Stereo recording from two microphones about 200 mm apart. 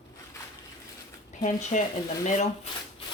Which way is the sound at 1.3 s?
35° left (ahead or behind).